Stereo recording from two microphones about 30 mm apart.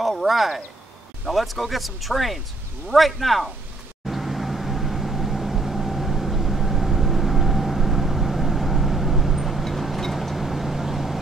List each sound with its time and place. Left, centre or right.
0.1 s speech: centre
4.1 s vehicle: centre